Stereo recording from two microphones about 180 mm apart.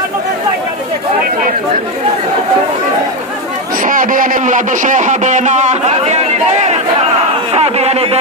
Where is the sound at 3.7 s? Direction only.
50° right (ahead or behind).